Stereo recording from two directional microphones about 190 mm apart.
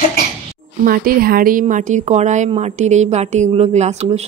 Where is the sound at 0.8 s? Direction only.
50° right (ahead or behind).